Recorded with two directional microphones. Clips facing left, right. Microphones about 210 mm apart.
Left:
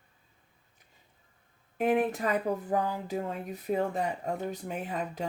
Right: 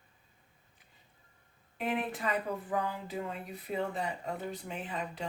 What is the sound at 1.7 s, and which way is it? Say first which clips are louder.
Speech: left 8 dB; 45° left (ahead or behind).